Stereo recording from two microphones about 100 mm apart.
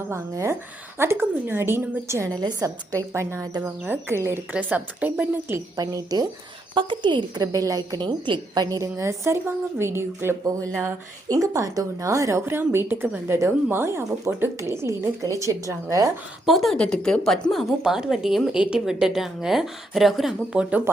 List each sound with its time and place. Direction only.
0.1 s a woman's voice: 25° right (ahead or behind)
2.3 s a woman's voice: 40° right (ahead or behind)
4.5 s a woman's voice: 15° right (ahead or behind)
5.7 s a woman's voice: 40° right (ahead or behind)
6.7 s a woman's voice: 55° right (ahead or behind)
7.4 s a woman's voice: 35° right (ahead or behind); by 8.6 s 55° right (ahead or behind)
8.6 s a woman's voice: 35° right (ahead or behind)
16.5 s a woman's voice: centre (ahead or behind)